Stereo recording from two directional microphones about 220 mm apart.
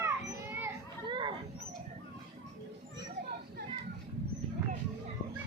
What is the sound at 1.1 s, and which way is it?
Wild animals, 20° right (ahead or behind).